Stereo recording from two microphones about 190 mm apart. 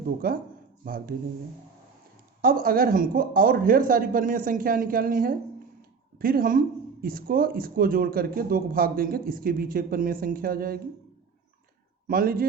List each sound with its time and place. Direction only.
0.2 s speech: 50° right (ahead or behind)
2.4 s speech: 50° right (ahead or behind)
12.0 s speech: 50° right (ahead or behind)